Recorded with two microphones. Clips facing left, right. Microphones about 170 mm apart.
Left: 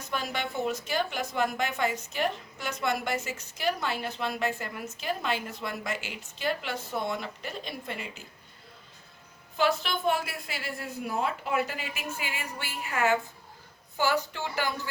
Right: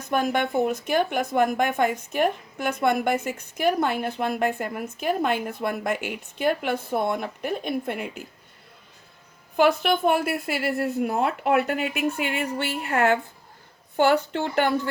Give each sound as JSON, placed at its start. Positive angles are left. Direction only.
{"t": 0.0, "sound": "a woman's voice", "side_deg": -55}
{"t": 9.6, "sound": "a woman's voice", "side_deg": -55}